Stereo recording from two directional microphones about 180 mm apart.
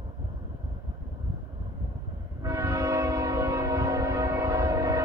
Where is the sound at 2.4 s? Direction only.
15° right (ahead or behind).